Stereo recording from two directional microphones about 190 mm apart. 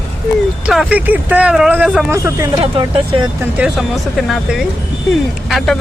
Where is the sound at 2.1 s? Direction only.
15° right (ahead or behind).